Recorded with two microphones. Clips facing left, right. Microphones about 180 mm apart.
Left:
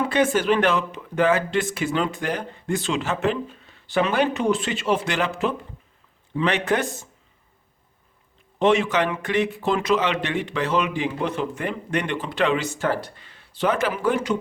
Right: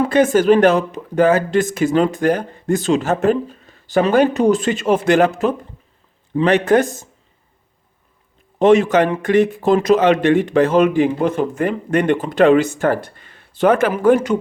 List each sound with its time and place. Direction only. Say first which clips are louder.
0.0 s speech: right 7 dB; 45° right (ahead or behind)
8.5 s speech: right 7 dB; 45° right (ahead or behind)